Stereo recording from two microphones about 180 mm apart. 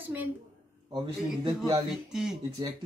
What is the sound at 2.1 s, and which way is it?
Speech, 5° right (ahead or behind).